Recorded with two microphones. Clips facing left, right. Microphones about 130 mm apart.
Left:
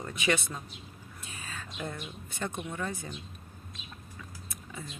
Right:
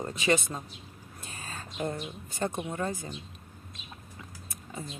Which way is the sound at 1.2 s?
40° right (ahead or behind).